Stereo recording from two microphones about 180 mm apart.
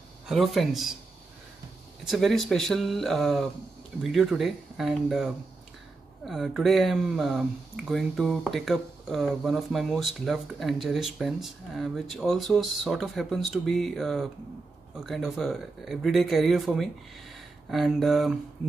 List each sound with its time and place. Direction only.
0.3 s speech: centre (ahead or behind)
2.0 s speech: centre (ahead or behind)